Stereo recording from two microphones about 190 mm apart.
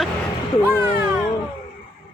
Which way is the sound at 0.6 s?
20° left (ahead or behind).